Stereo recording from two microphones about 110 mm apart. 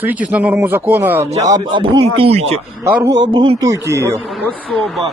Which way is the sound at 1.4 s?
40° right (ahead or behind).